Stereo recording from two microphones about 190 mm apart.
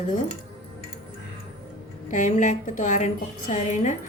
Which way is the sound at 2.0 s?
40° left (ahead or behind).